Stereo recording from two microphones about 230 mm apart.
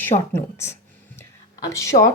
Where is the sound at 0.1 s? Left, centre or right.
Left.